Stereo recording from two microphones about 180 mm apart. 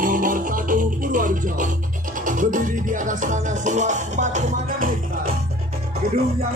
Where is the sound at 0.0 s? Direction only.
50° right (ahead or behind).